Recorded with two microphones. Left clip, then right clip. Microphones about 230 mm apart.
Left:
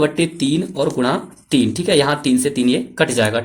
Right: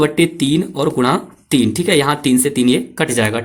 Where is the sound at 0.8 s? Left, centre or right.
Right.